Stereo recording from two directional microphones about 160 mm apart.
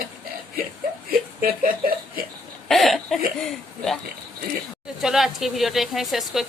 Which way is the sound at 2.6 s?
Centre (ahead or behind).